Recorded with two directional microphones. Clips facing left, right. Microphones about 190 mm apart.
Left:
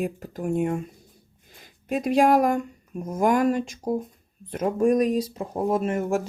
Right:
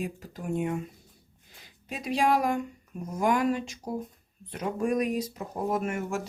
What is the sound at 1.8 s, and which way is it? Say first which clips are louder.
Speech: left 7 dB; 50° left (ahead or behind).